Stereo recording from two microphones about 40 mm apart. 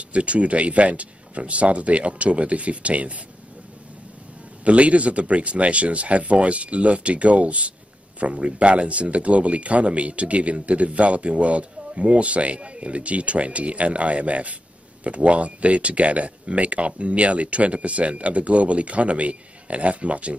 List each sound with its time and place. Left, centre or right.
0.1 s speech: right
4.6 s speech: right